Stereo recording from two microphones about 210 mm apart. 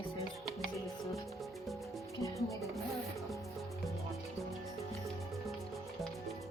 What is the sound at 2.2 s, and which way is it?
Music, 15° left (ahead or behind).